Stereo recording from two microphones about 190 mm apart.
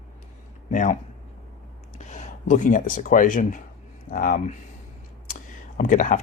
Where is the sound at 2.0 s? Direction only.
40° left (ahead or behind).